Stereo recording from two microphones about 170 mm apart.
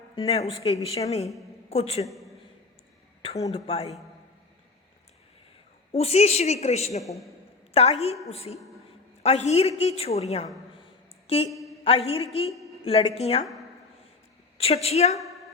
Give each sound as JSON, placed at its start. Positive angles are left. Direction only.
{"t": 0.3, "sound": "a woman's voice", "side_deg": 35}
{"t": 2.0, "sound": "a sound", "side_deg": 0}
{"t": 3.2, "sound": "a sound", "side_deg": 35}
{"t": 3.5, "sound": "a woman's voice", "side_deg": 35}
{"t": 5.9, "sound": "a woman's voice", "side_deg": 35}
{"t": 14.6, "sound": "a woman's voice", "side_deg": 35}